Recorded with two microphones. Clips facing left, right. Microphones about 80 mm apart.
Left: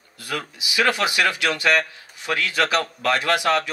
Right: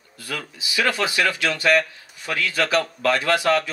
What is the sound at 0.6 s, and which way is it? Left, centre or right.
A man's voice, centre.